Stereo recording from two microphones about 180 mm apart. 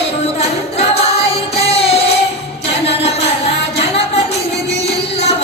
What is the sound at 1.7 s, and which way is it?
Music, 35° left (ahead or behind).